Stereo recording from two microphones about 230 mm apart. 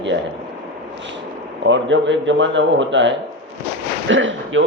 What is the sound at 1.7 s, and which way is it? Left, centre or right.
A man's voice, right.